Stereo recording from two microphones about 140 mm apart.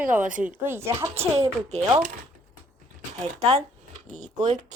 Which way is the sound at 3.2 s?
50° right (ahead or behind).